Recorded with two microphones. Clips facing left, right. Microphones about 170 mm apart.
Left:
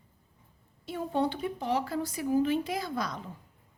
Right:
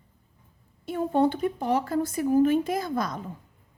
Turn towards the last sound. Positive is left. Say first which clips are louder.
# right 5 dB
turn(degrees=-45)  # may be behind; listen again after turning